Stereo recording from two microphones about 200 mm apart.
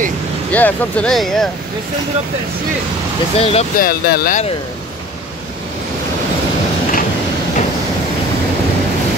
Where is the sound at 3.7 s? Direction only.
50° left (ahead or behind).